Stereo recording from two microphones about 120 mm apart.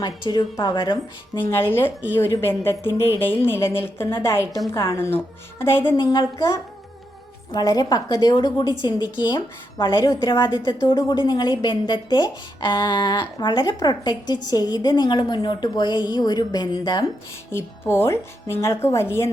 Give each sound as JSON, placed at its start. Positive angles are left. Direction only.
{"t": 0.0, "sound": "a woman's voice", "side_deg": 35}
{"t": 1.4, "sound": "a woman's voice", "side_deg": 20}
{"t": 6.0, "sound": "a woman's voice", "side_deg": 35}
{"t": 7.5, "sound": "a woman's voice", "side_deg": 30}
{"t": 9.7, "sound": "a woman's voice", "side_deg": 25}
{"t": 17.5, "sound": "a woman's voice", "side_deg": 20}